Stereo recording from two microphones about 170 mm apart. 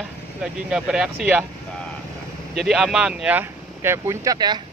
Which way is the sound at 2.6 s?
Centre (ahead or behind).